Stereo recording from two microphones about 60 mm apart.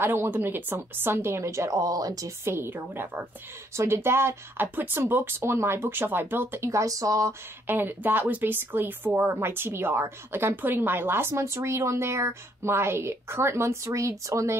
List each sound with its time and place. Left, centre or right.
0.0 s speech: right
2.4 s speech: right
3.7 s speech: right
4.7 s speech: right
6.7 s speech: right
7.6 s speech: right
13.8 s speech: right